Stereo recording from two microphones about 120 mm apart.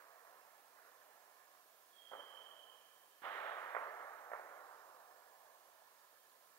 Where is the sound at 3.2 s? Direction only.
20° left (ahead or behind).